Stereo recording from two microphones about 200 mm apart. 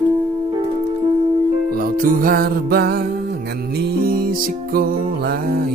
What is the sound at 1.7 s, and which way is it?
Music, 45° right (ahead or behind).